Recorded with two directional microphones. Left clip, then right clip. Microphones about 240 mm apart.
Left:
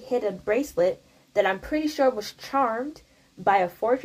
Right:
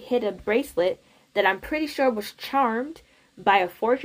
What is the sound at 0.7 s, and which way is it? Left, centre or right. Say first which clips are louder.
Speech: left 1 dB; right.